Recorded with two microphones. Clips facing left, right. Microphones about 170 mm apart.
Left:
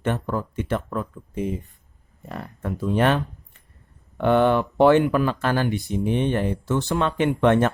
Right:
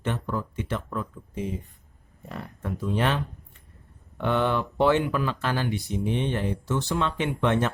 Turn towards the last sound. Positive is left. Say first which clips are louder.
# left 6 dB
turn(degrees=55)  # may be behind; listen again after turning